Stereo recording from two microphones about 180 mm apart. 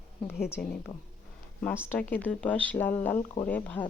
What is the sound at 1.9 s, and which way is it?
Speech, 10° left (ahead or behind).